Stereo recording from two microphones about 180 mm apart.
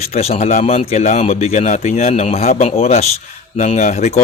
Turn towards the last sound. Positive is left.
turn(degrees=40)  # may be behind; listen again after turning